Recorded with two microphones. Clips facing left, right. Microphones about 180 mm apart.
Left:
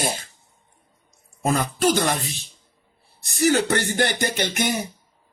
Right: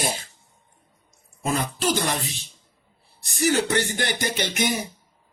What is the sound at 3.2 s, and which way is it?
Speech, 50° left (ahead or behind).